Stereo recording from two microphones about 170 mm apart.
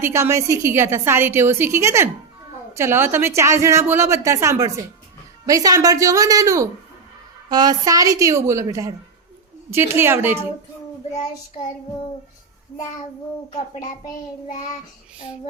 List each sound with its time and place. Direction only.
0.0 s a woman's voice: 15° right (ahead or behind)